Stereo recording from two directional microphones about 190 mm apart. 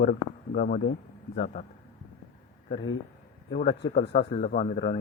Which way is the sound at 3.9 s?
40° left (ahead or behind).